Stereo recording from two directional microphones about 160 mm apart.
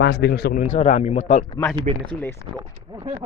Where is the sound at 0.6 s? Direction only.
45° left (ahead or behind).